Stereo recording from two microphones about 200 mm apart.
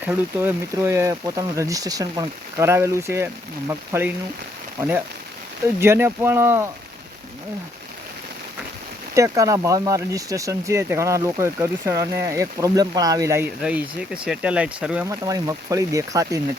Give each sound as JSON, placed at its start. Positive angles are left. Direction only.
{"t": 0.0, "sound": "speech", "side_deg": -10}
{"t": 9.1, "sound": "speech", "side_deg": -15}
{"t": 15.0, "sound": "speech", "side_deg": -15}